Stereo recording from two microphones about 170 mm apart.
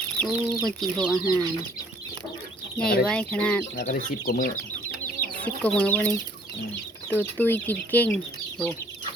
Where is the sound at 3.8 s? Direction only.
50° left (ahead or behind).